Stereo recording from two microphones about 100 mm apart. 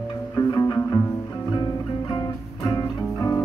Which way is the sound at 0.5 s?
40° left (ahead or behind).